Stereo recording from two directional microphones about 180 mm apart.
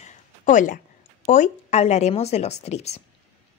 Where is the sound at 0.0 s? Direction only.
40° left (ahead or behind).